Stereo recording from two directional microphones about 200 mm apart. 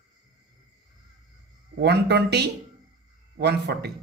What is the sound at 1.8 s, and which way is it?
Speech, 55° right (ahead or behind).